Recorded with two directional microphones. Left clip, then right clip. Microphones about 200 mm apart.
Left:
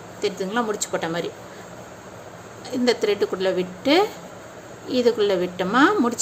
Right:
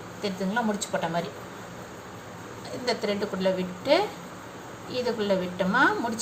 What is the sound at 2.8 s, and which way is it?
Speech, 55° left (ahead or behind).